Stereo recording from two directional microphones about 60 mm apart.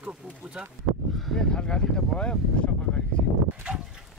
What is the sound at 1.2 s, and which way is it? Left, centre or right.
Speech, centre.